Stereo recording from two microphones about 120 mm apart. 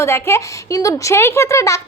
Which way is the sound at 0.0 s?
20° left (ahead or behind).